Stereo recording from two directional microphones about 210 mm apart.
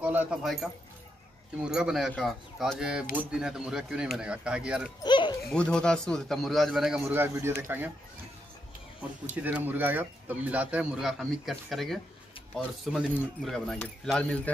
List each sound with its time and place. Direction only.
0.0 s speech: 10° right (ahead or behind)
5.0 s a sound: 20° left (ahead or behind)
5.5 s speech: 5° left (ahead or behind)
9.3 s speech: 10° right (ahead or behind)